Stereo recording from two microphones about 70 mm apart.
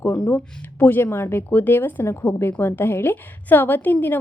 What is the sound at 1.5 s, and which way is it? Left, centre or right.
A woman's voice, left.